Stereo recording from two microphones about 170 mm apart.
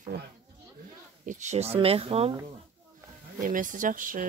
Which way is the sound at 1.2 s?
40° right (ahead or behind).